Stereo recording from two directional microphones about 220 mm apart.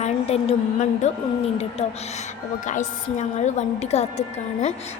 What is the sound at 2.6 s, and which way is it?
A woman's voice, 35° left (ahead or behind).